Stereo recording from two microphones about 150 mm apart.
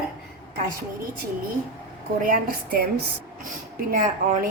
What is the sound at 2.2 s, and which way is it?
Speech, 85° right.